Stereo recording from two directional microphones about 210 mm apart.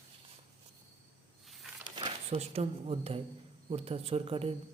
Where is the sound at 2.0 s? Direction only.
25° right (ahead or behind).